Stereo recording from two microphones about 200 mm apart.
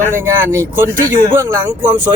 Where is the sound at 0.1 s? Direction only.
10° right (ahead or behind).